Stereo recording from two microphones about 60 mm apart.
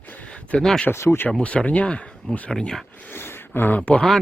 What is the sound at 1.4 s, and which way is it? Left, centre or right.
Speech, left.